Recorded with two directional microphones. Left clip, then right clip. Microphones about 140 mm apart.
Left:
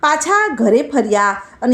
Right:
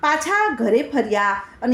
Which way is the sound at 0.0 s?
45° left (ahead or behind).